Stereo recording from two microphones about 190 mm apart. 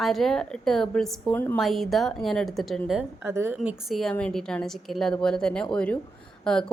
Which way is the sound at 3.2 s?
15° right (ahead or behind).